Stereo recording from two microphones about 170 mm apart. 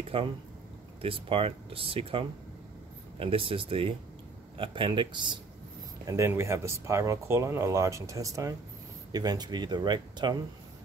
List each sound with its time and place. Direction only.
0.1 s speech: 30° right (ahead or behind)
6.0 s speech: 15° right (ahead or behind)